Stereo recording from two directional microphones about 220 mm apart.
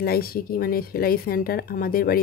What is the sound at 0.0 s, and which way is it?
Speech, 45° left (ahead or behind).